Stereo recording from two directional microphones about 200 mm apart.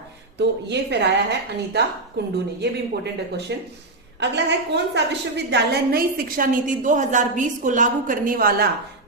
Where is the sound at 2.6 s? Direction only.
55° right (ahead or behind).